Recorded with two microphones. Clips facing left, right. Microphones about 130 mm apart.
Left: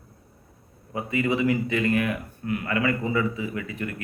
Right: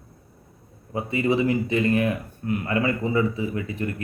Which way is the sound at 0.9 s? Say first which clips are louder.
Right 2 dB; 30° right (ahead or behind).